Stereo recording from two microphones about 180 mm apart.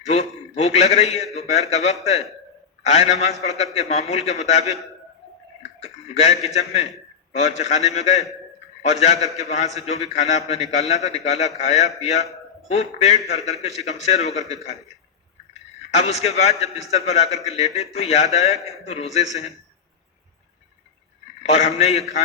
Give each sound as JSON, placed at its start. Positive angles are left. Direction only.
{"t": 0.0, "sound": "a man's voice", "side_deg": 35}
{"t": 5.8, "sound": "a sound", "side_deg": 35}
{"t": 6.4, "sound": "a man's voice", "side_deg": 35}
{"t": 16.0, "sound": "a man's voice", "side_deg": 35}
{"t": 21.4, "sound": "a man's voice", "side_deg": 35}